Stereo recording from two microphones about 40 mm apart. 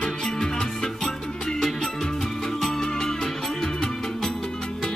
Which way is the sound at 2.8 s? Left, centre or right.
Centre.